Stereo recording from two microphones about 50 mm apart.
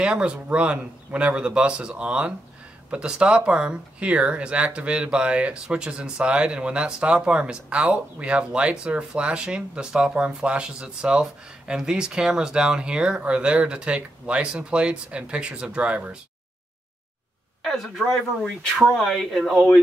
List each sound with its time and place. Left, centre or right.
0.0 s speech: right
17.6 s a sound: centre
17.8 s speech: centre